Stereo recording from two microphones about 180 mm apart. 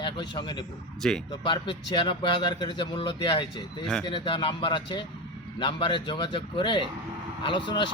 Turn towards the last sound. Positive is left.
turn(degrees=25)  # may be behind; listen again after turning